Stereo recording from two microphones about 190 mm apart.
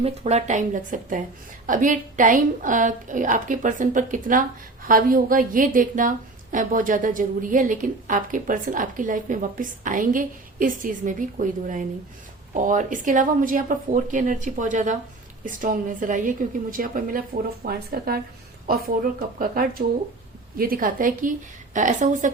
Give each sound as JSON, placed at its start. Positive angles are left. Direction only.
{"t": 0.0, "sound": "a woman's voice", "side_deg": -35}